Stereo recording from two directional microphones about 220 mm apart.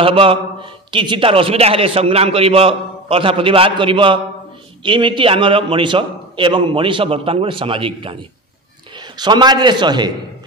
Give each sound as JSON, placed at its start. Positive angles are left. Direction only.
{"t": 0.0, "sound": "a man's voice", "side_deg": -25}